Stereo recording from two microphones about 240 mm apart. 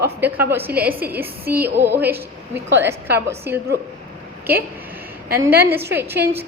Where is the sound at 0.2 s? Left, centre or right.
Centre.